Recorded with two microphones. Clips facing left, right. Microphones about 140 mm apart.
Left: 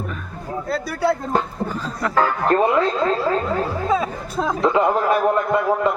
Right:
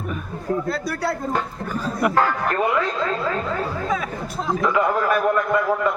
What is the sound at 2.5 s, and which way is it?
Speech, 30° left (ahead or behind).